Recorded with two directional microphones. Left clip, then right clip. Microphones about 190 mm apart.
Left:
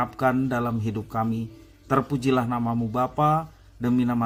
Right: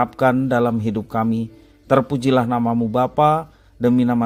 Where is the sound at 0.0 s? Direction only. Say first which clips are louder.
Right 6 dB; 40° right (ahead or behind).